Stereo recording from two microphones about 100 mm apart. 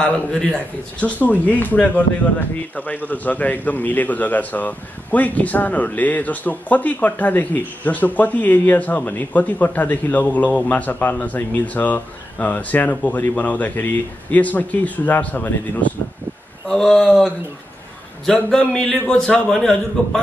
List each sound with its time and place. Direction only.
0.0 s a man's voice: 10° left (ahead or behind)
16.6 s a man's voice: 5° left (ahead or behind)